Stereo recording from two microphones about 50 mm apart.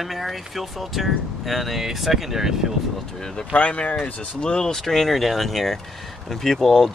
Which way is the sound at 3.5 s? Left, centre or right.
Left.